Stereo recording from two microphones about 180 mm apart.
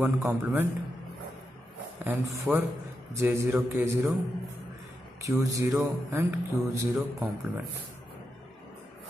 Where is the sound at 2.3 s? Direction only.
10° right (ahead or behind).